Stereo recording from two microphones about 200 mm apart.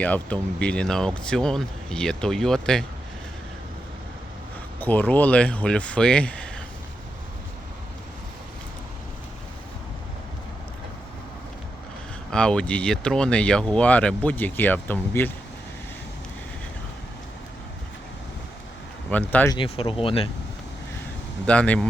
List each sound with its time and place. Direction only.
0.0 s speech: 5° left (ahead or behind)
4.8 s speech: 10° left (ahead or behind)
12.3 s speech: 5° left (ahead or behind)
19.1 s speech: 10° left (ahead or behind)
19.5 s speech: 30° left (ahead or behind)
21.4 s speech: 5° left (ahead or behind)